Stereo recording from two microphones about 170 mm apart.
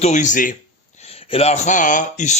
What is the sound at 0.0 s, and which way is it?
Speech, 45° left (ahead or behind).